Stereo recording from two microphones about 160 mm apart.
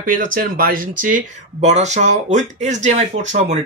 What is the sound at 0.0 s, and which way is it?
Speech, 60° right (ahead or behind).